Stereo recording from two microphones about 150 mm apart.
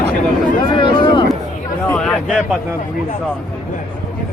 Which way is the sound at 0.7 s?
30° left (ahead or behind).